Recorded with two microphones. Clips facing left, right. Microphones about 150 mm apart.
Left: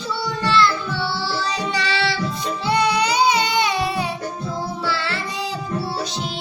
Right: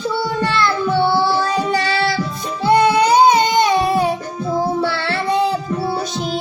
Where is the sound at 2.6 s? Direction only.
50° right (ahead or behind).